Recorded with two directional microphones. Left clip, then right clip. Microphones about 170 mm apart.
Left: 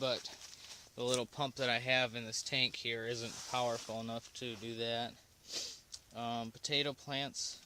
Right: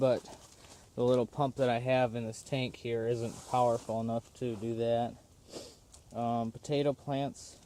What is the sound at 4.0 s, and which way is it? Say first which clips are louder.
Speech: right 7 dB; centre (ahead or behind).